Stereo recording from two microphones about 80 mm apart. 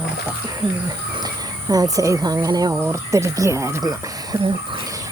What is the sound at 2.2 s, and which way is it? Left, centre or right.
Speech, right.